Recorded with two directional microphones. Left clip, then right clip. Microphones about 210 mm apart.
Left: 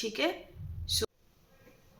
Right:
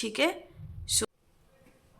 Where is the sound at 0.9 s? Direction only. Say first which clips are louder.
Right 1 dB; 30° right (ahead or behind).